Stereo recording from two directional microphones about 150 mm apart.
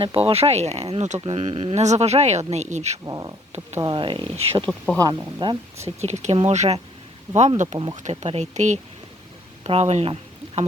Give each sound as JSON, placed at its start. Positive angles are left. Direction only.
{"t": 0.0, "sound": "speech", "side_deg": -40}
{"t": 3.0, "sound": "speech", "side_deg": -25}
{"t": 4.9, "sound": "speech", "side_deg": -25}
{"t": 6.0, "sound": "speech", "side_deg": -45}